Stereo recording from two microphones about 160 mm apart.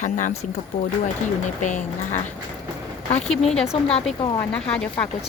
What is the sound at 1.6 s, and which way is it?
Speech, 50° left (ahead or behind).